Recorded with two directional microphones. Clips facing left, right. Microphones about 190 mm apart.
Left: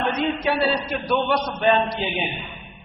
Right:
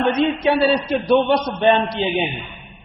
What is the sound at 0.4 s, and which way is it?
A man's voice, 25° right (ahead or behind).